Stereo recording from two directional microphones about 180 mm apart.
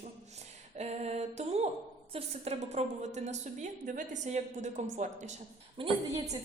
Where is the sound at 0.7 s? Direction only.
35° right (ahead or behind).